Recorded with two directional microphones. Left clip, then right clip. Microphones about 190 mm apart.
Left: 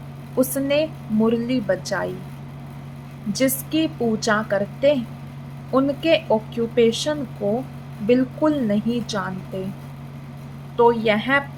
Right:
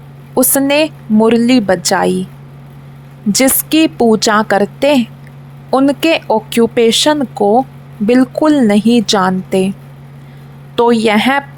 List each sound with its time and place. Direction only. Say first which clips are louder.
0.3 s a woman's voice: right 9 dB; 60° right (ahead or behind)
3.3 s a woman's voice: right 10 dB; 60° right (ahead or behind)
10.8 s a woman's voice: right 7 dB; 60° right (ahead or behind)